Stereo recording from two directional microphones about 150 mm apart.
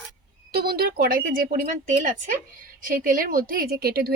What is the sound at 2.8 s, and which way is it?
A woman's voice, 70° right (ahead or behind).